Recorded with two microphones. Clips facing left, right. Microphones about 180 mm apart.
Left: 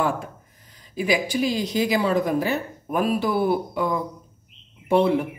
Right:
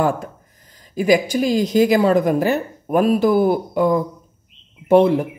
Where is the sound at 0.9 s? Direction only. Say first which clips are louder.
Right 6 dB; 45° right (ahead or behind).